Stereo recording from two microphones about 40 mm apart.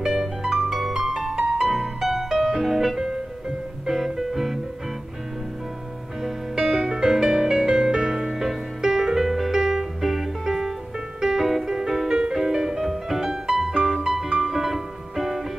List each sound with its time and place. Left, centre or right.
0.0 s music: centre
1.6 s music: centre
6.2 s music: centre
12.4 s music: centre